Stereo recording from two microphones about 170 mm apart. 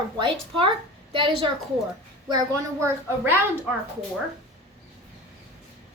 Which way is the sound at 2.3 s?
20° right (ahead or behind).